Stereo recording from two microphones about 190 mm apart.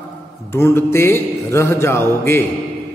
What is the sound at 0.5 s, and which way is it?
A man's voice, 15° left (ahead or behind).